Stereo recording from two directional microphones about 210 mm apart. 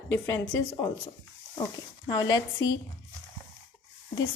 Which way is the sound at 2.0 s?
20° left (ahead or behind).